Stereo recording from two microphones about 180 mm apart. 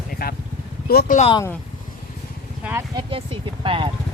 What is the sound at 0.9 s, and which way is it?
Speech, 55° left (ahead or behind).